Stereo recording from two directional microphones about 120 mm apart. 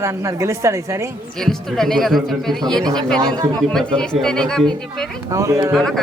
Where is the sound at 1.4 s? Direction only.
5° left (ahead or behind).